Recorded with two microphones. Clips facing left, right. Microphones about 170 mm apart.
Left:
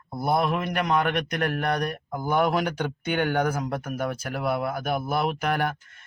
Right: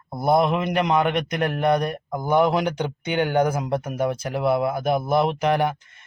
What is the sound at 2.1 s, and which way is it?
Speech, 15° right (ahead or behind).